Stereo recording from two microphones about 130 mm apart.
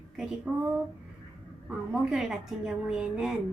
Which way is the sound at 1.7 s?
5° right (ahead or behind).